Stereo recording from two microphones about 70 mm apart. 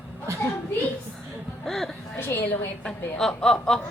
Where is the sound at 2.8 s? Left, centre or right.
Centre.